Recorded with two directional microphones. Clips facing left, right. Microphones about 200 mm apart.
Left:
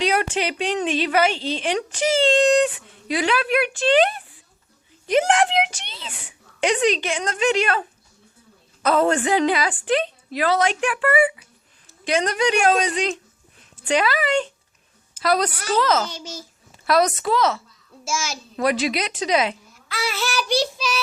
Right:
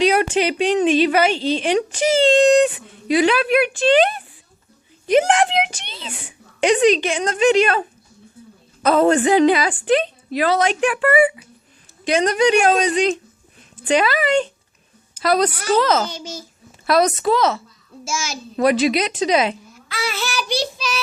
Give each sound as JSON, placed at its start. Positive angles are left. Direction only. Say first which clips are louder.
{"t": 0.0, "sound": "a woman's voice", "louder": "right 5 dB", "side_deg": -15}
{"t": 16.0, "sound": "a child's voice", "louder": "right 3 dB", "side_deg": 0}
{"t": 16.8, "sound": "a woman's voice", "louder": "right 3 dB", "side_deg": -20}
{"t": 20.1, "sound": "child singing", "louder": "left 1 dB", "side_deg": 5}